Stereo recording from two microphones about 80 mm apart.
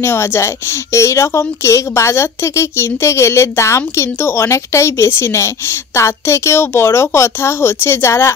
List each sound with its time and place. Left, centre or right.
0.0 s a woman's voice: left